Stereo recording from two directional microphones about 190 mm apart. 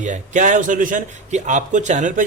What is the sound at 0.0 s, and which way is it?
Speech, 40° right (ahead or behind).